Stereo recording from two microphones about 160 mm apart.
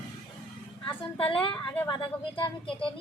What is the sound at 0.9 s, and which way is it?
Speech, 30° left (ahead or behind).